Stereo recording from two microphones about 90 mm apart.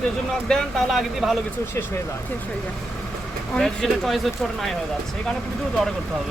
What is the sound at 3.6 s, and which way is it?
Speech, 5° left (ahead or behind).